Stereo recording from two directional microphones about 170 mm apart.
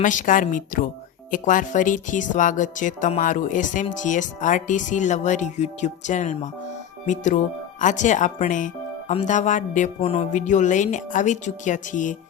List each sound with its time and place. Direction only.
0.0 s speech: 50° left (ahead or behind)